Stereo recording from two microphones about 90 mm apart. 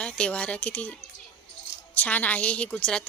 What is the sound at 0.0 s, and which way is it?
Speech, 10° left (ahead or behind).